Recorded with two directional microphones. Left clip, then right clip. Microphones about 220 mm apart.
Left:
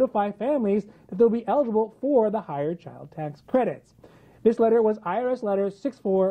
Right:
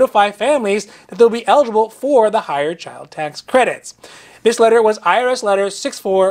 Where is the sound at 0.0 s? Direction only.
10° right (ahead or behind).